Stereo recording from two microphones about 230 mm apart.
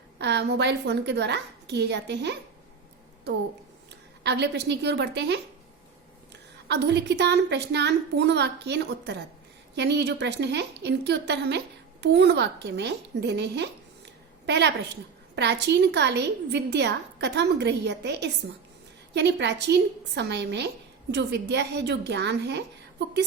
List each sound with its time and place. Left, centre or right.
0.2 s a woman's voice: right
4.2 s a woman's voice: right
6.7 s a woman's voice: right